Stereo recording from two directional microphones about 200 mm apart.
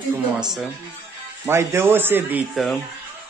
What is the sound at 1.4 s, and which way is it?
Speech, 15° right (ahead or behind).